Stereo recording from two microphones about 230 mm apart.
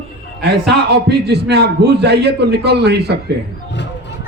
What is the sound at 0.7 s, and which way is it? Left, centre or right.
A man's voice, right.